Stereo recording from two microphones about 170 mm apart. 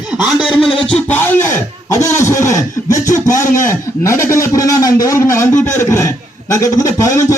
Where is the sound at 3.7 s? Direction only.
15° left (ahead or behind).